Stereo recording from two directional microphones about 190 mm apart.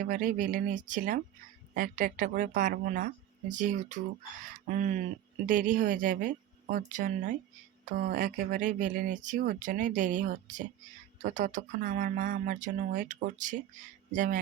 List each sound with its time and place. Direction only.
0.0 s speech: 45° right (ahead or behind)